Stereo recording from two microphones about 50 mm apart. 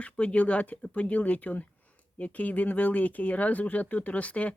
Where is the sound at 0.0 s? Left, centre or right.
Left.